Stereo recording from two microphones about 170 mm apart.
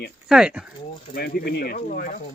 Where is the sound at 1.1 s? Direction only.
60° left (ahead or behind).